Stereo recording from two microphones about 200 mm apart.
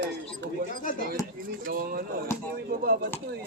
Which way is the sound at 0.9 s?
40° left (ahead or behind).